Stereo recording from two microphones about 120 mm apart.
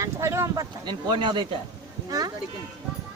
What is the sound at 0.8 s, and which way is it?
Speech, 40° right (ahead or behind).